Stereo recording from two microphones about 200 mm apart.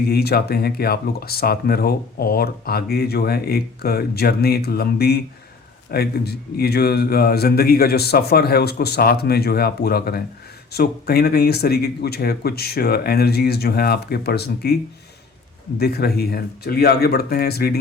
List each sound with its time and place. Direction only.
0.1 s speech: 50° left (ahead or behind)
15.8 s speech: 50° left (ahead or behind)